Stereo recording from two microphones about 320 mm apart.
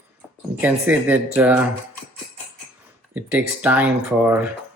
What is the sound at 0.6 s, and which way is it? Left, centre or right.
Speech, centre.